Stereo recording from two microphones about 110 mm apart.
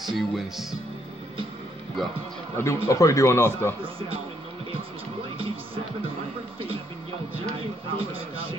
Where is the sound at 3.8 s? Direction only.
55° right (ahead or behind).